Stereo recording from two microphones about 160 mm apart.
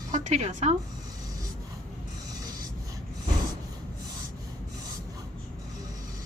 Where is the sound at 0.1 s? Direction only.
45° right (ahead or behind).